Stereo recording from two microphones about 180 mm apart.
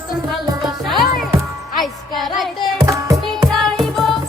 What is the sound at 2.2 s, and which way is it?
Music, centre (ahead or behind).